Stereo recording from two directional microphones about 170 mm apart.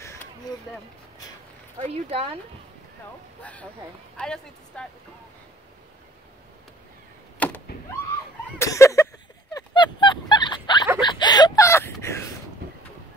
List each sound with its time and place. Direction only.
0.0 s a sound: 15° left (ahead or behind)
1.8 s speech: 35° right (ahead or behind)
4.2 s speech: 5° left (ahead or behind)
7.3 s power windows: 10° left (ahead or behind)
8.5 s fowl: 15° left (ahead or behind)
11.0 s a sound: 25° left (ahead or behind)